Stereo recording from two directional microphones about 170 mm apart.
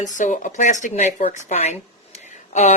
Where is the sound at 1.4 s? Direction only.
40° left (ahead or behind).